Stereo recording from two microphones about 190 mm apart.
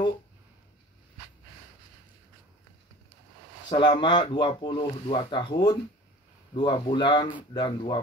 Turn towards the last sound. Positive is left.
turn(degrees=25)  # may be behind; listen again after turning